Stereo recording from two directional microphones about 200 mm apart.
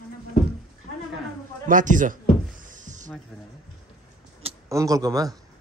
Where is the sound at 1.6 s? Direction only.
40° right (ahead or behind).